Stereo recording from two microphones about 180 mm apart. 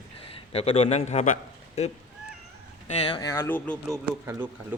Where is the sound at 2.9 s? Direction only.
30° left (ahead or behind).